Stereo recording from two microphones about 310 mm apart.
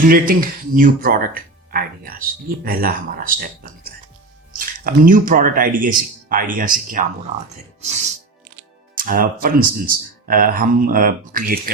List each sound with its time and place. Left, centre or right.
0.0 s speech: right